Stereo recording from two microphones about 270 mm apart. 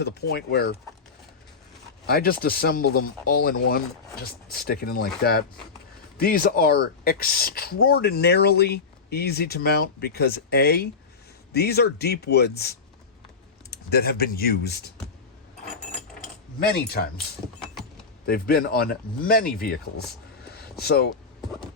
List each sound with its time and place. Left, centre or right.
0.0 s speech: left
2.0 s speech: left
16.7 s speech: left
18.3 s speech: left